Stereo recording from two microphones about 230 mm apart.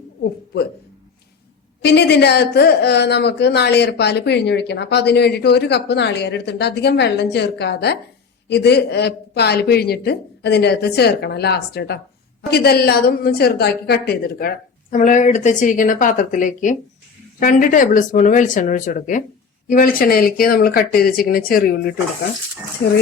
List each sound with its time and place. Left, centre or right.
1.8 s a woman's voice: left